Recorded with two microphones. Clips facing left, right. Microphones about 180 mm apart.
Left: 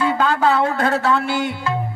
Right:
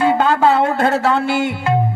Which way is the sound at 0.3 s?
25° right (ahead or behind).